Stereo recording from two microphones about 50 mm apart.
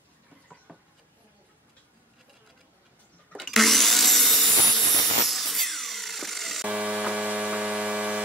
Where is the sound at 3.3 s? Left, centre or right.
Centre.